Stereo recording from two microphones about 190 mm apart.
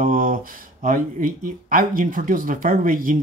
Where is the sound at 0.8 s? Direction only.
45° right (ahead or behind).